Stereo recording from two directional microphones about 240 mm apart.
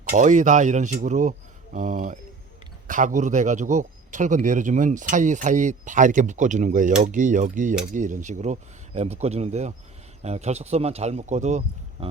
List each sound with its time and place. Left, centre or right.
0.1 s speech: right